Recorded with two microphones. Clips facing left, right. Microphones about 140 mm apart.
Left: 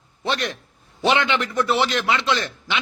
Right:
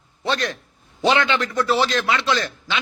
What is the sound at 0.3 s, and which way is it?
A man's voice, 20° left (ahead or behind).